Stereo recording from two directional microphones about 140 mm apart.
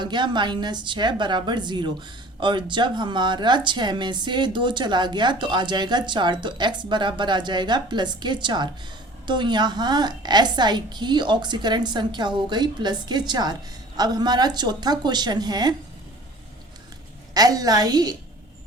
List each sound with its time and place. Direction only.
0.0 s a woman's voice: 35° right (ahead or behind)
17.3 s a woman's voice: 25° right (ahead or behind)